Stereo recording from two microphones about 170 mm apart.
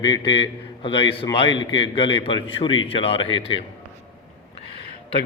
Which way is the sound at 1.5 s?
90° left.